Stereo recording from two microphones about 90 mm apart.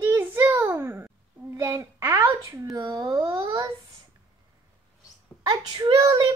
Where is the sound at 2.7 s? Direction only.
50° right (ahead or behind).